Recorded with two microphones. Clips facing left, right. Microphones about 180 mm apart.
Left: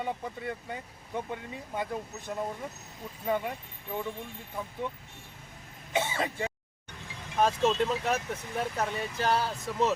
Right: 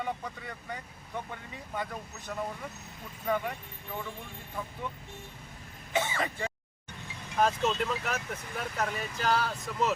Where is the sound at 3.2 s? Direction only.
15° left (ahead or behind).